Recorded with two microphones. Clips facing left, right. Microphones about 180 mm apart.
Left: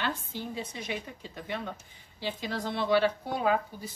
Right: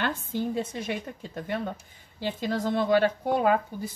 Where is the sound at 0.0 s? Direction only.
50° right (ahead or behind).